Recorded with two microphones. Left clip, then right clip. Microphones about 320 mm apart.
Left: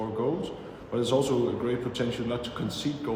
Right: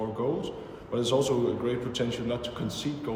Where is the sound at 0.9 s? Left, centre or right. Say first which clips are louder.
Even; centre.